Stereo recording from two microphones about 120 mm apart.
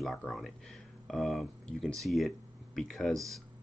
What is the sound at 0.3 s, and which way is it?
Speech, centre (ahead or behind).